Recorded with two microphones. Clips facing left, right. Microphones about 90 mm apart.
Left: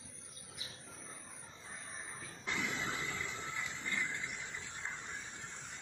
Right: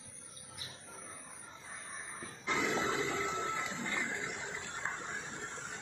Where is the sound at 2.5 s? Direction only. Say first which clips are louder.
Right 6 dB; 90° right.